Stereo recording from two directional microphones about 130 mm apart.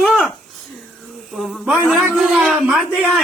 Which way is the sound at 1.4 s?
5° right (ahead or behind).